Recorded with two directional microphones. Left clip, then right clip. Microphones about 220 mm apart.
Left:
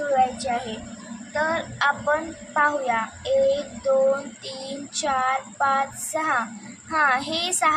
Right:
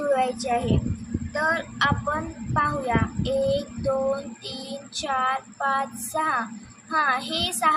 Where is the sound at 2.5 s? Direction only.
10° left (ahead or behind).